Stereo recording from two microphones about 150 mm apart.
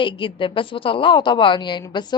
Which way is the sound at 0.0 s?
35° left (ahead or behind).